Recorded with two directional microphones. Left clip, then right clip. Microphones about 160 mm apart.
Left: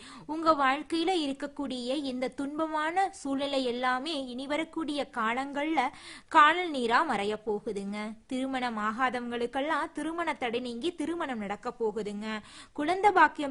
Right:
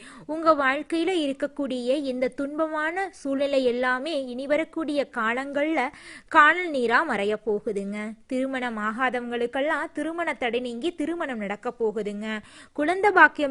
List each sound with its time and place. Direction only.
0.3 s a woman's voice: 20° right (ahead or behind)